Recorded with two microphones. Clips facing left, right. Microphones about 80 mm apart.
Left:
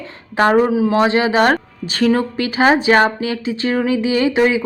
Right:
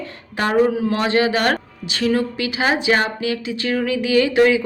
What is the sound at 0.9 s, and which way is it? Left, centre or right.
Speech, left.